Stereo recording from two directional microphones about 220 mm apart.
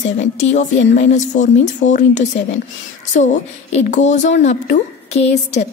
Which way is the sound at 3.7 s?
30° left (ahead or behind).